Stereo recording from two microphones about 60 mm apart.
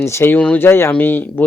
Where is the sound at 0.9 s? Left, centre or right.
Left.